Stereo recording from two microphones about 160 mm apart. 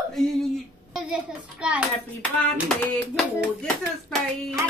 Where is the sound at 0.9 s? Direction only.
Centre (ahead or behind).